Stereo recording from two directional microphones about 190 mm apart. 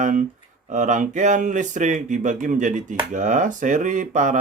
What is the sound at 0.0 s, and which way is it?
Speech, 40° right (ahead or behind).